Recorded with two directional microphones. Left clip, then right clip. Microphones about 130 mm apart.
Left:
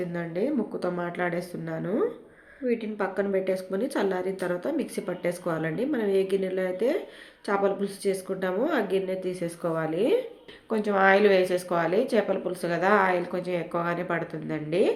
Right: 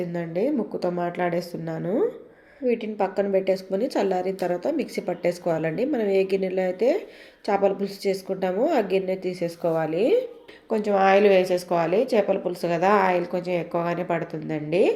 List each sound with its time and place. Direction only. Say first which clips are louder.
0.1 s a woman's voice: right 3 dB; 20° right (ahead or behind)